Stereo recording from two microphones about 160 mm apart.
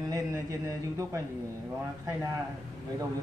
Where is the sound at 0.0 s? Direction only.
20° right (ahead or behind).